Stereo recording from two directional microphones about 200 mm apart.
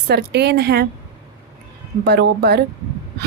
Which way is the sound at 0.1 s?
55° right (ahead or behind).